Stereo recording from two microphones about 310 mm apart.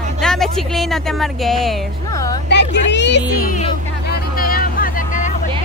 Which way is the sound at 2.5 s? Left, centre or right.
Left.